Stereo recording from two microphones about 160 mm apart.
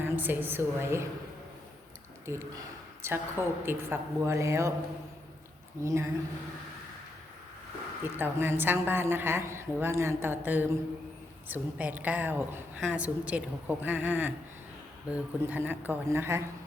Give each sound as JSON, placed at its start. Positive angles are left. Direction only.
{"t": 0.0, "sound": "a woman's voice", "side_deg": -10}
{"t": 2.2, "sound": "a woman's voice", "side_deg": -15}
{"t": 5.8, "sound": "a woman's voice", "side_deg": -20}
{"t": 8.1, "sound": "a woman's voice", "side_deg": -15}